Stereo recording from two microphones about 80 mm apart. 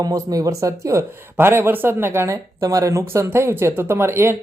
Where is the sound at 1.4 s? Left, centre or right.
Right.